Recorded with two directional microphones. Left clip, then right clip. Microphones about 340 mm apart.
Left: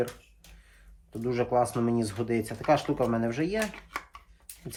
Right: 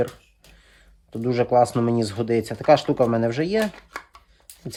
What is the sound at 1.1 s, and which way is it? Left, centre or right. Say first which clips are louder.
Speech: right 7 dB; right.